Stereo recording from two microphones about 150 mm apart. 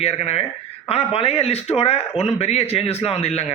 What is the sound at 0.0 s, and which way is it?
A man's voice, 45° left (ahead or behind).